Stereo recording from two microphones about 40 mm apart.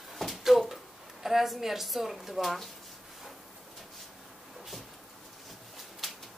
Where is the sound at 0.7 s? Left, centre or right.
Centre.